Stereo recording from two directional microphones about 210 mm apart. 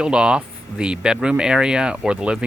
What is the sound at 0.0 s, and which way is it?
Speech, 5° right (ahead or behind).